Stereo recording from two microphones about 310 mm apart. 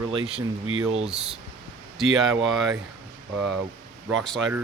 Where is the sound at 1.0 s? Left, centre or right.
Centre.